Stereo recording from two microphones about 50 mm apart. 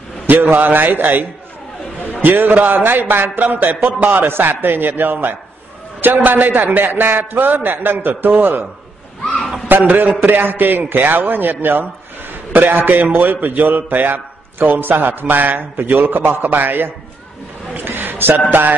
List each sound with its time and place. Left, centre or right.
0.3 s a man's voice: right
2.2 s a man's voice: right
4.3 s a man's voice: right
9.7 s a man's voice: right
17.7 s a sound: right
18.5 s a man's voice: right